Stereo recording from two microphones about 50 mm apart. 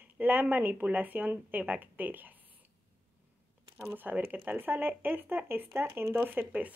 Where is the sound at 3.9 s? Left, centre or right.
Right.